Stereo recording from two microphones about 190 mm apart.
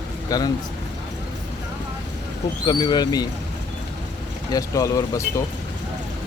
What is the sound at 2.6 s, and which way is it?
Speech, 20° left (ahead or behind).